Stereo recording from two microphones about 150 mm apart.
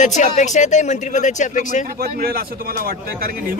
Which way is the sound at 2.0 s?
80° right.